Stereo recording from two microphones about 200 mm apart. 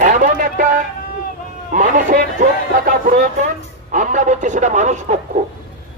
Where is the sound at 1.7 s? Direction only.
40° right (ahead or behind).